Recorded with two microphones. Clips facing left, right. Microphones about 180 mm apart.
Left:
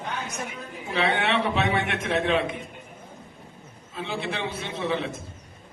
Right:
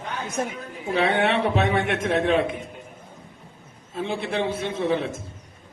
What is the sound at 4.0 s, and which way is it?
A man's voice, 50° right (ahead or behind).